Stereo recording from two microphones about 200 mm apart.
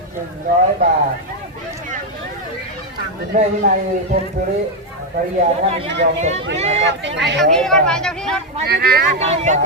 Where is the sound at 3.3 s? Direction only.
40° right (ahead or behind).